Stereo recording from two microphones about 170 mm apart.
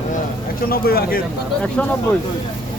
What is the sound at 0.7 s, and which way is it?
Speech, 60° left (ahead or behind).